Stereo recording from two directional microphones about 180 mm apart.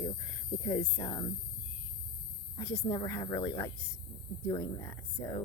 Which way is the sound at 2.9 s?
20° left (ahead or behind).